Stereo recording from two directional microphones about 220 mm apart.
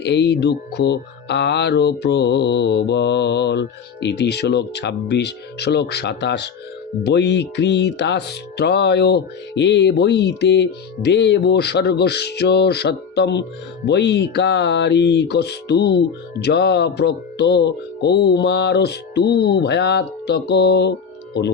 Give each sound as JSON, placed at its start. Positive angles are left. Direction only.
{"t": 0.0, "sound": "speech", "side_deg": 50}